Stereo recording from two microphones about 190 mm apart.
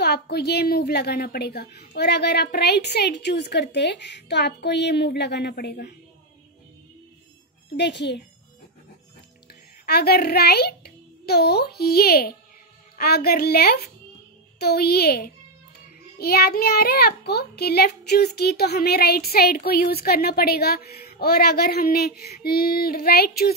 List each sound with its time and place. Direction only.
0.0 s a child's voice: 60° left (ahead or behind)
7.7 s a child's voice: 65° left (ahead or behind)
9.8 s a child's voice: 55° left (ahead or behind)